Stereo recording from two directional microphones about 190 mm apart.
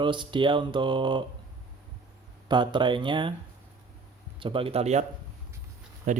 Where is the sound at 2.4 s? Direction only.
25° right (ahead or behind).